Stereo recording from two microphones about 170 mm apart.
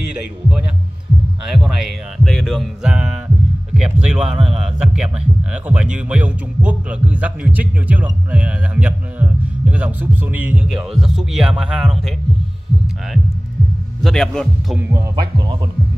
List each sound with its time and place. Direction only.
0.1 s a man's voice: 5° right (ahead or behind)
14.0 s a man's voice: centre (ahead or behind)
14.8 s speech: 20° right (ahead or behind)